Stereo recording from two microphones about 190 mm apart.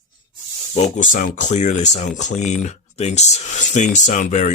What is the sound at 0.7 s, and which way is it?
Speech, 40° left (ahead or behind).